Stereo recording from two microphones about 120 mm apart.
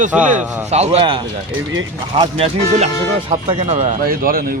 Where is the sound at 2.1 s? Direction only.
55° right (ahead or behind); by 3.9 s 70° right (ahead or behind).